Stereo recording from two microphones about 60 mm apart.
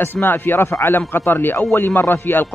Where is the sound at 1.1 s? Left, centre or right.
Left.